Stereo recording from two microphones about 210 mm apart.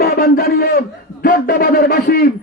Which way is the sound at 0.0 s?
45° left (ahead or behind).